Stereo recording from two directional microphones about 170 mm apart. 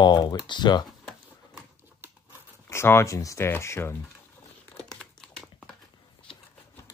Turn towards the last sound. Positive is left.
turn(degrees=5)  # may be behind; listen again after turning